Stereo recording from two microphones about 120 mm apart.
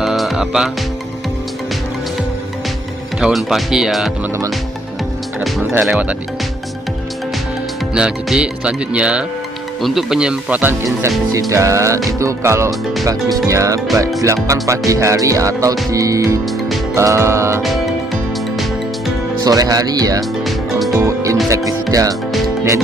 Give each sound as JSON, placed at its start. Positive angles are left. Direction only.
{"t": 0.0, "sound": "music", "side_deg": 0}
{"t": 3.2, "sound": "speech", "side_deg": -5}
{"t": 5.9, "sound": "music", "side_deg": -10}
{"t": 7.9, "sound": "music", "side_deg": -5}
{"t": 9.8, "sound": "speech", "side_deg": 0}
{"t": 17.6, "sound": "music", "side_deg": 0}
{"t": 19.4, "sound": "speech", "side_deg": -30}
{"t": 20.4, "sound": "music", "side_deg": 0}
{"t": 21.0, "sound": "music", "side_deg": -25}
{"t": 21.9, "sound": "speech", "side_deg": -30}